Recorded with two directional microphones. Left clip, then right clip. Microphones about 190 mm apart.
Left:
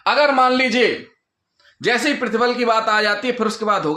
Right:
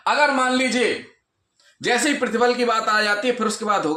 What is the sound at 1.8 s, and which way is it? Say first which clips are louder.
Speech: left 2 dB; 30° left (ahead or behind).